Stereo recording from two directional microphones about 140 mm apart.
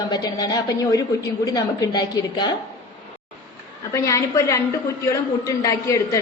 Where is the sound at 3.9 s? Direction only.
20° left (ahead or behind).